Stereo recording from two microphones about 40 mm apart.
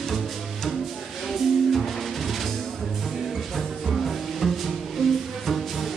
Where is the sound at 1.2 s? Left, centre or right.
Centre.